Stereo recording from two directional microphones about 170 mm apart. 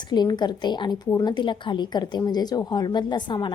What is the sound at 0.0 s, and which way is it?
A woman's voice, 25° left (ahead or behind).